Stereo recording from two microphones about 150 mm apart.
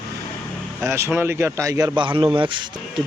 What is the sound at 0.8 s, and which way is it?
A man's voice, 20° right (ahead or behind).